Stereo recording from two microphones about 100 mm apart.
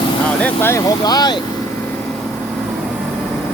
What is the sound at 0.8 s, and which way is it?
Speech, 45° left (ahead or behind).